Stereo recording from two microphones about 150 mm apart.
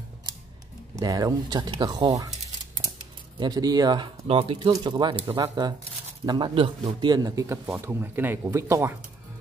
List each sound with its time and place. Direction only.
0.9 s speech: 25° right (ahead or behind)
3.3 s speech: 25° right (ahead or behind)